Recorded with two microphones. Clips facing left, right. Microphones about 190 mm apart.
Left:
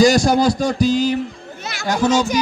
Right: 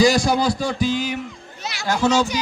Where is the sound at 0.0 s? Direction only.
45° left (ahead or behind).